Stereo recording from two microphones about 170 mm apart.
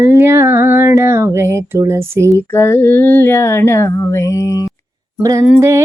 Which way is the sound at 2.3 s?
15° left (ahead or behind).